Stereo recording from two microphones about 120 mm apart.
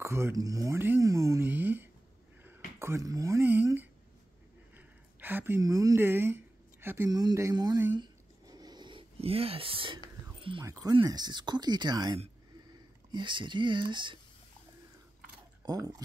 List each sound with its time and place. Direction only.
0.0 s speech: 20° right (ahead or behind)
2.4 s a sound: 20° right (ahead or behind)
5.6 s speech: 30° right (ahead or behind)
7.1 s speech: 30° right (ahead or behind)
7.9 s a sound: 35° right (ahead or behind)
9.2 s speech: 55° right (ahead or behind)
10.6 s speech: 30° right (ahead or behind)
15.6 s speech: 30° right (ahead or behind)